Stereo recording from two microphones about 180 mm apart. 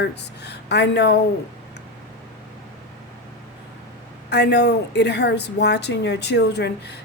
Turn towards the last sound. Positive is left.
turn(degrees=70)  # may be behind; listen again after turning